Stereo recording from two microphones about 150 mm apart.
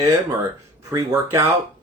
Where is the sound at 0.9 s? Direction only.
25° right (ahead or behind).